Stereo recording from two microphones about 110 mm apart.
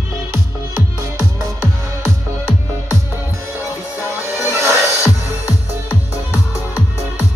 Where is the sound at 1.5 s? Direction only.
25° left (ahead or behind).